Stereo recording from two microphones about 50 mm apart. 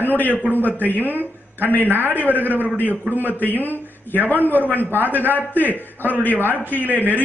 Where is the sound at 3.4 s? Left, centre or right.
Left.